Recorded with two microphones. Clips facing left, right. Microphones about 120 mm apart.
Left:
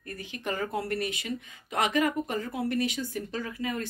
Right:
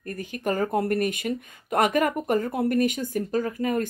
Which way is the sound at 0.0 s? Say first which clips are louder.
Right 7 dB; 45° right (ahead or behind).